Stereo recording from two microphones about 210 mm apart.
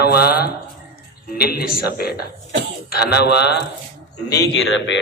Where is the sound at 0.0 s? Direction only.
45° left (ahead or behind).